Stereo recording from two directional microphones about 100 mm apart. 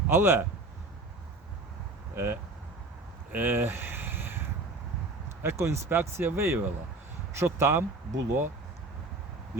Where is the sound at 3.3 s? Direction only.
20° right (ahead or behind).